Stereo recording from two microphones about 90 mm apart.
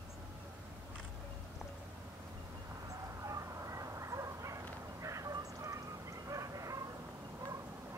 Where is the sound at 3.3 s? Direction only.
40° right (ahead or behind).